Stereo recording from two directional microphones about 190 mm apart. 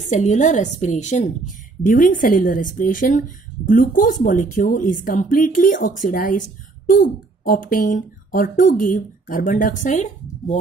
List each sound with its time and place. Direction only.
0.1 s a woman's voice: 40° left (ahead or behind)